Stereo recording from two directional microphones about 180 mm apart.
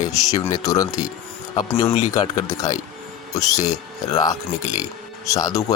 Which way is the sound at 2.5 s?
20° left (ahead or behind).